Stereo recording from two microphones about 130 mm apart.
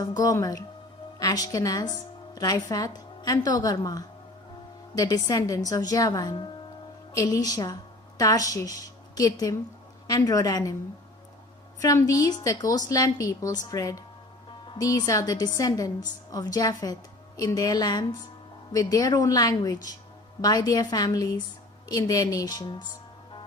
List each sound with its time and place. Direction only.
0.2 s a woman's voice: 25° left (ahead or behind)
11.8 s a woman's voice: 25° left (ahead or behind)